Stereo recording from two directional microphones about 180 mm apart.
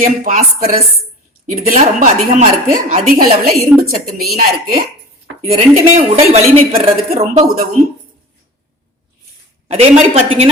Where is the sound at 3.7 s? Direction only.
10° right (ahead or behind).